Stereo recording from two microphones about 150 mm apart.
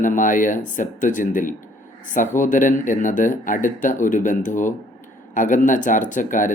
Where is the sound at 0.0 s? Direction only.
60° left (ahead or behind).